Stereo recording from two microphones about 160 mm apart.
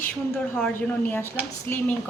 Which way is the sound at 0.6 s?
10° left (ahead or behind).